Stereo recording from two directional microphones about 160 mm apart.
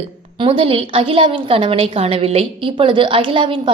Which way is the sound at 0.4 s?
35° right (ahead or behind).